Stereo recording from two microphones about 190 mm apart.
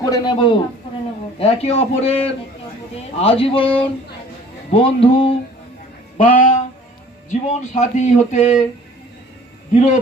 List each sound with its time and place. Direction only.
0.0 s speech: 20° left (ahead or behind)
1.4 s music: 30° left (ahead or behind)
3.2 s speech: 30° left (ahead or behind)
6.1 s speech: 45° left (ahead or behind)
7.3 s music: 35° left (ahead or behind)
9.7 s music: 40° left (ahead or behind)